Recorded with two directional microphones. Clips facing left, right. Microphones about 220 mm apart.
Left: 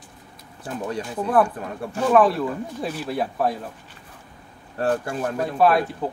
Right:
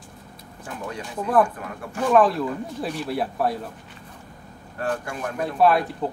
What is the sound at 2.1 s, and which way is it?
Speech, centre (ahead or behind).